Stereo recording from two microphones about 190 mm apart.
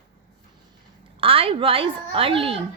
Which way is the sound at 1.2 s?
30° right (ahead or behind).